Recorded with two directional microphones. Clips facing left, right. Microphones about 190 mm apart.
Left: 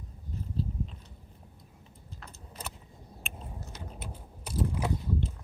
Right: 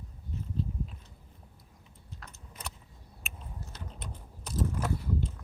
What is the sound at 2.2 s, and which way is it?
Keys jangling, centre (ahead or behind).